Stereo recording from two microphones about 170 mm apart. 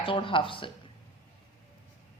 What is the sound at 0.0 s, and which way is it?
Speech, 30° left (ahead or behind).